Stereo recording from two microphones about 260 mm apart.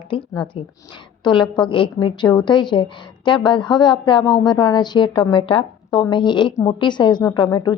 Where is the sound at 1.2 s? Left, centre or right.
Centre.